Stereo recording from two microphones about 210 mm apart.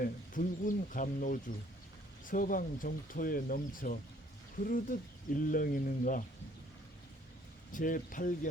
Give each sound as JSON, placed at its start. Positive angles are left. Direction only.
{"t": 0.0, "sound": "speech", "side_deg": 40}
{"t": 7.7, "sound": "speech", "side_deg": 40}